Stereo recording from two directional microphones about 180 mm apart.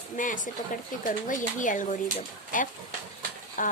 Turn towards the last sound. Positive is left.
turn(degrees=45)  # may be behind; listen again after turning